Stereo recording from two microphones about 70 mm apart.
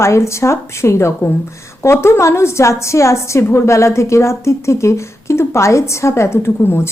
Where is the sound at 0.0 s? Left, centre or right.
Left.